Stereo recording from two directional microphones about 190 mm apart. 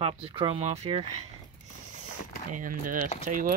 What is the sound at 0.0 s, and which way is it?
Speech, 30° right (ahead or behind).